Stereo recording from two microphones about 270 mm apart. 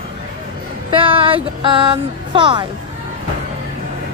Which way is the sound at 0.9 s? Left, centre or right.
Centre.